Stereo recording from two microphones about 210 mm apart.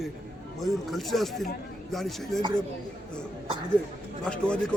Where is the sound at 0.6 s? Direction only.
Centre (ahead or behind).